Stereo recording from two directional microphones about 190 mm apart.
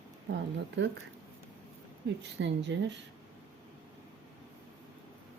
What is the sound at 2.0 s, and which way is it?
Speech, 65° right (ahead or behind).